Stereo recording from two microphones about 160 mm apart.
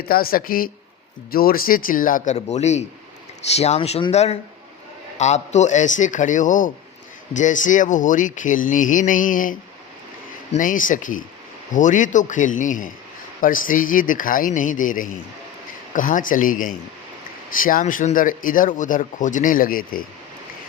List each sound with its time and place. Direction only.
0.0 s speech: 70° left (ahead or behind)